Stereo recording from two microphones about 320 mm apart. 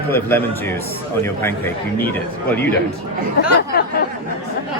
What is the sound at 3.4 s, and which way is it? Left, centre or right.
Speech, left.